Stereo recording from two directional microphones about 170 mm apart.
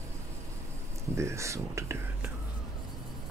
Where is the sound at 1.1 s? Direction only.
15° right (ahead or behind).